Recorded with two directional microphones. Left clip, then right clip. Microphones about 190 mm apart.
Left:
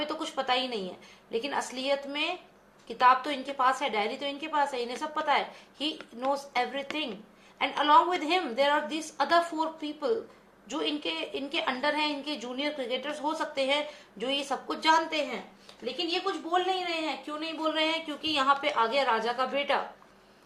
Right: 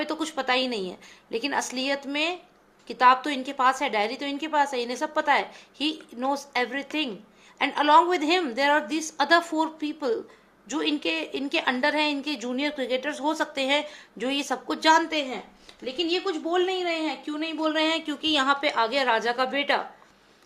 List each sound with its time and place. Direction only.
0.0 s a woman's voice: 45° right (ahead or behind)